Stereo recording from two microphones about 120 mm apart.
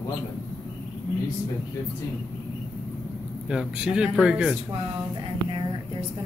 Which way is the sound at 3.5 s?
5° right (ahead or behind).